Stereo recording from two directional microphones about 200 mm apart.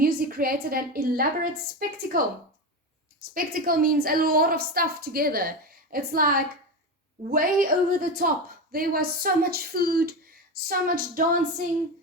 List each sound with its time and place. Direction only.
0.0 s a woman's voice: 45° right (ahead or behind)
3.3 s a woman's voice: 45° right (ahead or behind)